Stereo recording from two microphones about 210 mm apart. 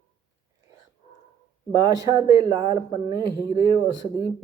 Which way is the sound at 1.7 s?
15° right (ahead or behind).